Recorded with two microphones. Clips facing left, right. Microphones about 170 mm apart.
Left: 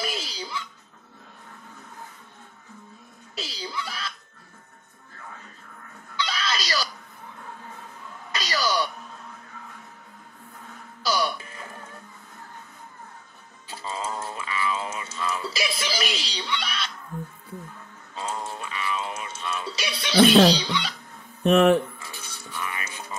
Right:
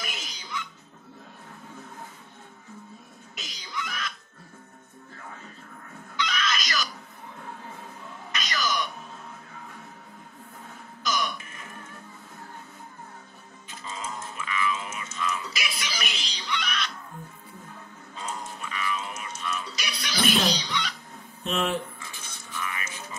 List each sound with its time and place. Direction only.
0.0 s music: 30° left (ahead or behind)
3.3 s music: 30° left (ahead or behind)
6.1 s music: 30° left (ahead or behind)
8.3 s music: 35° left (ahead or behind)
11.0 s music: 35° left (ahead or behind)
13.7 s music: 30° left (ahead or behind)
18.1 s music: 30° left (ahead or behind)
21.4 s speech: 55° left (ahead or behind)
22.1 s music: 35° left (ahead or behind)